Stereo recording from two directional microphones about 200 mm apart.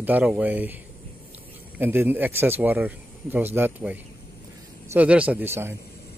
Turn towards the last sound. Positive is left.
turn(degrees=-10)  # may be behind; listen again after turning